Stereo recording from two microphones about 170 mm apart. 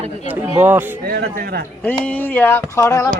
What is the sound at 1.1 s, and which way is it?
Speech, 60° right (ahead or behind).